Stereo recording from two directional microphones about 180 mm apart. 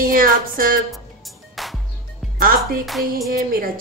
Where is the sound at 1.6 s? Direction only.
Centre (ahead or behind).